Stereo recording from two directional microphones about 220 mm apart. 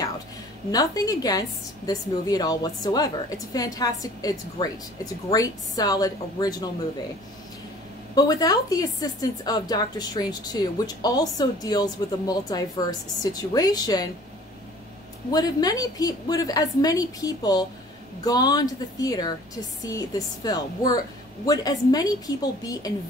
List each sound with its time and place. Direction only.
0.7 s a woman's voice: 15° left (ahead or behind)
8.1 s a woman's voice: 15° left (ahead or behind)
15.3 s a woman's voice: 15° left (ahead or behind)